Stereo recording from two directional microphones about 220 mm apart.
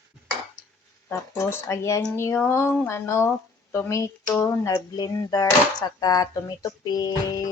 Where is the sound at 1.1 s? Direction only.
10° left (ahead or behind).